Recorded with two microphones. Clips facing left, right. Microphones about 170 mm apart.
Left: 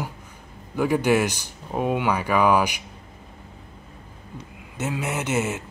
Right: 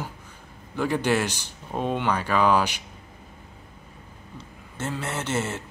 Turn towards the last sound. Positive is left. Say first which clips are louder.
# left 3 dB
turn(degrees=10)  # may be behind; listen again after turning